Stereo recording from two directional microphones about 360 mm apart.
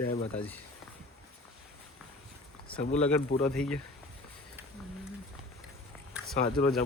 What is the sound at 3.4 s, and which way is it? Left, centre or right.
Speech, centre.